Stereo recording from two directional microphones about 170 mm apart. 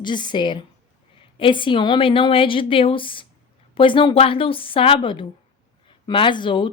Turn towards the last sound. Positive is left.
turn(degrees=30)  # may be behind; listen again after turning